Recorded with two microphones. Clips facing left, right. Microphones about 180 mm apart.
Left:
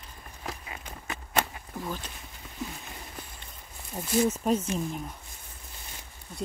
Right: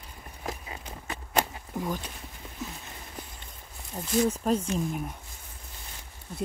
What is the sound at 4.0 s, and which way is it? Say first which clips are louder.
Speech: even; 10° left (ahead or behind).